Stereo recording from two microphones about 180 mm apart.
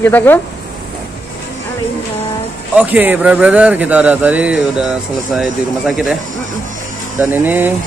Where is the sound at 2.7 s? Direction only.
10° right (ahead or behind).